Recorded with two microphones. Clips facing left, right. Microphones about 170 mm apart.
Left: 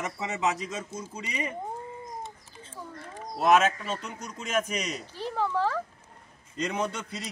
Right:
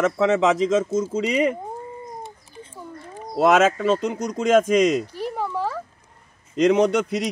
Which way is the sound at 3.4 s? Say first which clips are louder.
Right 6 dB; 90° right.